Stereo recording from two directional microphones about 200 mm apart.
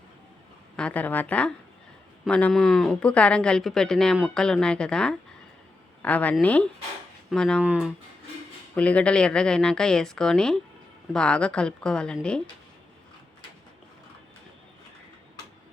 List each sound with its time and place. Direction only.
0.8 s a woman's voice: 5° left (ahead or behind)
8.7 s speech: 5° left (ahead or behind)